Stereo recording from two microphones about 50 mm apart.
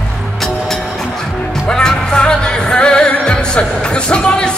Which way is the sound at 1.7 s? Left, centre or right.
Centre.